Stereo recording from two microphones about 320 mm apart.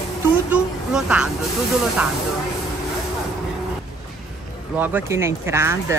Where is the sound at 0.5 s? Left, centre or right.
Centre.